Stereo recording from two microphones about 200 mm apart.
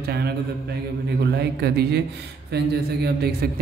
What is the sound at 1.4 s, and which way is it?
Mantra, 55° right (ahead or behind).